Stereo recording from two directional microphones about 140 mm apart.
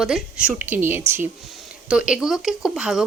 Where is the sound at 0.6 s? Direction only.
15° right (ahead or behind).